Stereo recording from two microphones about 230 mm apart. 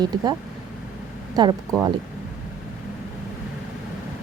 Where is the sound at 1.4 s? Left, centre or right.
Centre.